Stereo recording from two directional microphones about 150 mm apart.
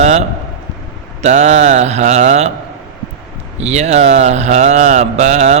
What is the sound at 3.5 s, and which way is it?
A man's voice, 50° right (ahead or behind).